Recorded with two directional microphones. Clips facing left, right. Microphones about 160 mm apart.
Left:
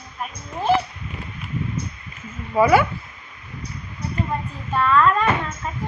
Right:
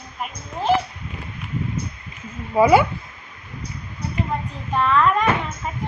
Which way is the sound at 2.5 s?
20° right (ahead or behind).